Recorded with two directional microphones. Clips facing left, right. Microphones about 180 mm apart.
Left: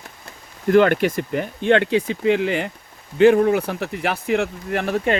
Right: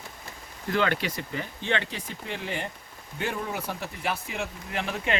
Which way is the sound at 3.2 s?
80° left.